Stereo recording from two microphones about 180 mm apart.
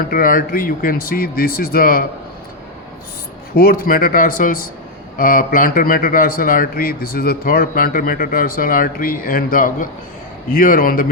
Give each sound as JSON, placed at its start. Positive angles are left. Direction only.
{"t": 0.0, "sound": "speech", "side_deg": 55}
{"t": 3.5, "sound": "a man's voice", "side_deg": 55}